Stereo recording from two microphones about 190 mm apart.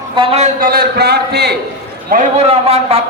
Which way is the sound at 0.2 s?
30° right (ahead or behind).